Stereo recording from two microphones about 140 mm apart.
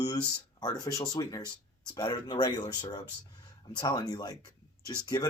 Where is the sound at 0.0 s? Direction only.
30° left (ahead or behind).